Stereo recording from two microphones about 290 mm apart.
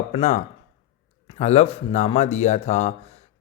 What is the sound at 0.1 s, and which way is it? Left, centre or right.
Speech, left.